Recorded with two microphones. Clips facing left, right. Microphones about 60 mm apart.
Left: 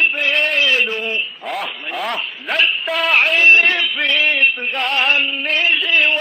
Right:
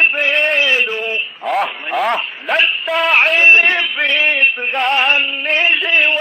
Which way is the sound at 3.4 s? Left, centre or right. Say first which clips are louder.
Right 2 dB; right.